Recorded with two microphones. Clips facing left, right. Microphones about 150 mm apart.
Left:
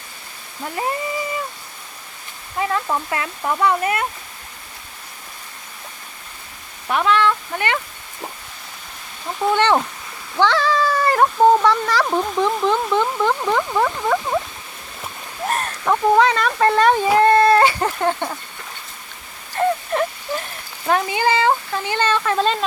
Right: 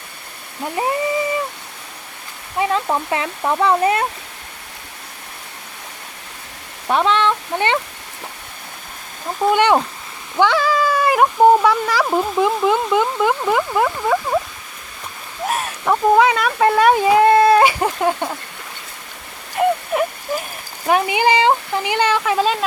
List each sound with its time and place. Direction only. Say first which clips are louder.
0.8 s speech: right 3 dB; 20° right (ahead or behind)
2.6 s speech: right 3 dB; 20° right (ahead or behind)
6.8 s speech: right 1 dB; 25° right (ahead or behind)
9.5 s speech: right 2 dB; 15° right (ahead or behind)
15.4 s speech: right 1 dB; 5° right (ahead or behind)
19.5 s a sound: right 2 dB; 10° right (ahead or behind)
20.8 s speech: right 3 dB; 15° right (ahead or behind)